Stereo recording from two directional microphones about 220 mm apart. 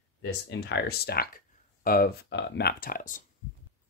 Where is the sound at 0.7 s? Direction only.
45° left (ahead or behind).